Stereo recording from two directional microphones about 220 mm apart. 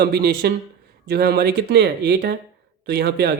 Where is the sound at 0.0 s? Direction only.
45° right (ahead or behind).